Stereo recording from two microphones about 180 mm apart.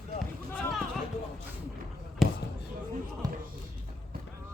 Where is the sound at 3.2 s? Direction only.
20° right (ahead or behind).